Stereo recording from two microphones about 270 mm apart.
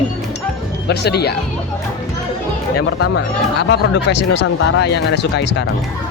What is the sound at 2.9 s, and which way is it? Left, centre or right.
Speech, left.